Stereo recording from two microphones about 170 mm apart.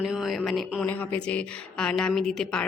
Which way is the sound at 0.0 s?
5° right (ahead or behind).